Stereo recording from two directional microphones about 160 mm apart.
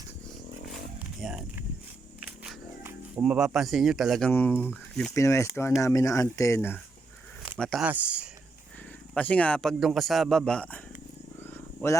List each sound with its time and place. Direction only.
1.2 s speech: 5° right (ahead or behind); by 6.7 s 15° left (ahead or behind)
7.6 s speech: 5° left (ahead or behind)
7.9 s speech: 10° right (ahead or behind)
9.1 s speech: 10° left (ahead or behind)
11.5 s wild animals: 15° left (ahead or behind)